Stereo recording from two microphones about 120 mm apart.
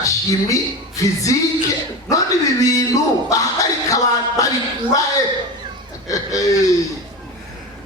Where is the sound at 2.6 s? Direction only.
30° left (ahead or behind).